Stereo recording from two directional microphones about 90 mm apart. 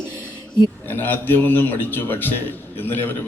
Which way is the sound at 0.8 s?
20° left (ahead or behind).